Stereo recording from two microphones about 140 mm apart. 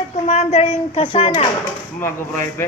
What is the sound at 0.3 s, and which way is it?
Speech, 50° left (ahead or behind).